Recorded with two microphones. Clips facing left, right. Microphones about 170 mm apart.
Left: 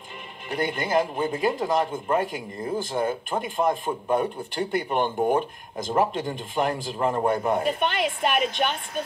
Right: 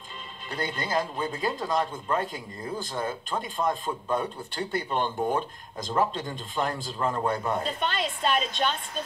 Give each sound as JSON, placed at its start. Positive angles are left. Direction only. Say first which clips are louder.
{"t": 0.5, "sound": "speech", "louder": "left 5 dB", "side_deg": 15}